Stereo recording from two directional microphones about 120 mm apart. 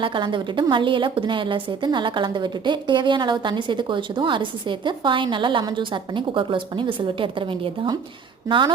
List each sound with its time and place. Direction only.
0.0 s a woman's voice: 40° right (ahead or behind)